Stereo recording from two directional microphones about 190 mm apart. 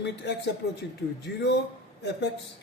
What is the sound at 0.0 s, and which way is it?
Speech, 65° left (ahead or behind).